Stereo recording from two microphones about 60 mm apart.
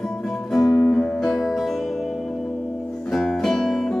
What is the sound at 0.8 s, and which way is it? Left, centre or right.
Music, left.